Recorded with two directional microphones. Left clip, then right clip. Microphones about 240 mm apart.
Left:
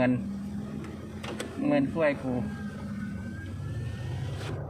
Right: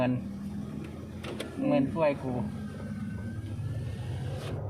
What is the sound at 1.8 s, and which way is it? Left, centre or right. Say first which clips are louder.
Speech: left 1 dB; centre.